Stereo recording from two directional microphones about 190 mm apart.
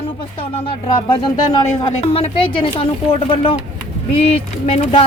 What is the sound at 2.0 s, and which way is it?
A woman's voice, 30° left (ahead or behind).